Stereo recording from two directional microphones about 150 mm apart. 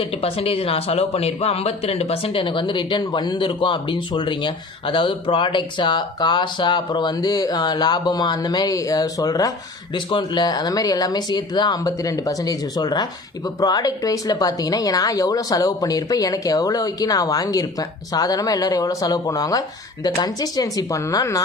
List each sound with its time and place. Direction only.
0.0 s speech: 40° left (ahead or behind); by 21.4 s 25° left (ahead or behind)